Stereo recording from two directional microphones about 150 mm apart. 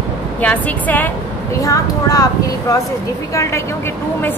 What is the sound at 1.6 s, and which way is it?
Speech, 25° left (ahead or behind).